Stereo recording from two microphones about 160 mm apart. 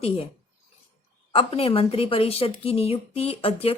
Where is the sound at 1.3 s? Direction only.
35° left (ahead or behind).